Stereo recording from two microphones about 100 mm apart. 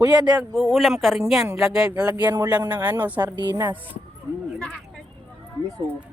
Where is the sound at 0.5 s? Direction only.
Centre (ahead or behind).